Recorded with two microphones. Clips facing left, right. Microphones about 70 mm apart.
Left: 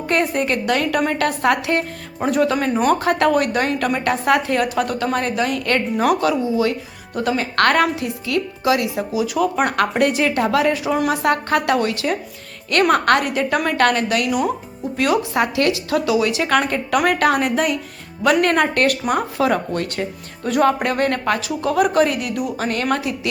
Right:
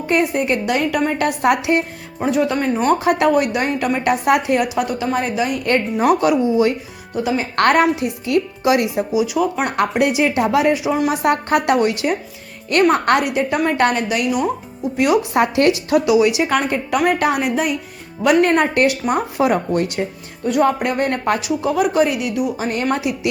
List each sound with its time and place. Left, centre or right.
0.1 s a woman's voice: centre
1.4 s a woman's voice: centre
2.1 s speech: centre
3.0 s a woman's voice: centre
4.0 s a woman's voice: centre
6.1 s speech: right
7.1 s speech: centre
7.5 s speech: right
9.1 s a woman's voice: centre
14.9 s a woman's voice: centre
15.4 s speech: right
16.0 s a woman's voice: centre
20.4 s music: centre
20.8 s a woman's voice: centre